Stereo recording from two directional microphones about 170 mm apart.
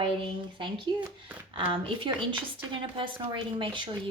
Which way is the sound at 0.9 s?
25° right (ahead or behind).